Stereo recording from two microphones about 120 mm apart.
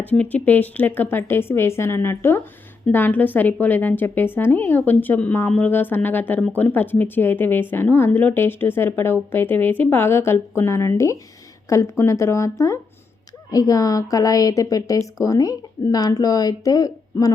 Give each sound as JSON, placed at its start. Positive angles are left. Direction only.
{"t": 0.0, "sound": "a woman's voice", "side_deg": 15}